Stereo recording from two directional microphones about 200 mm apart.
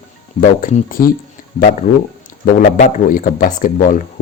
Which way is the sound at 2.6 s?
40° left (ahead or behind).